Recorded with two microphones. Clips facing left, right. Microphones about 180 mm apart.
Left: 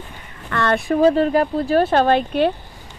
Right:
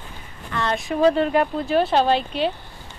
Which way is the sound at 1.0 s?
35° left (ahead or behind).